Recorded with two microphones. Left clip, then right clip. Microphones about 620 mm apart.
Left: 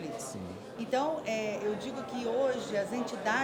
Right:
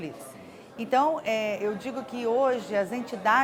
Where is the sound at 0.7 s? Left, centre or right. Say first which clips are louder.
Right 7 dB; right.